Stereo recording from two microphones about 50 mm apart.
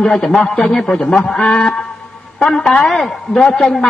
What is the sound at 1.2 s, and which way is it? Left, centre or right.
Speech, left.